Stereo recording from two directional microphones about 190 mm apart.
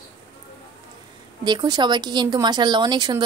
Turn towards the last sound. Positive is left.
turn(degrees=-20)  # may be behind; listen again after turning